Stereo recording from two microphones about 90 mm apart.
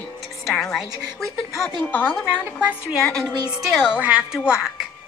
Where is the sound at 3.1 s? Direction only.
5° left (ahead or behind).